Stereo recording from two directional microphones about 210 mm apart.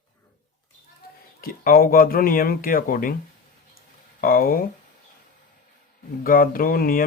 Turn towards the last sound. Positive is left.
turn(degrees=45)  # may be behind; listen again after turning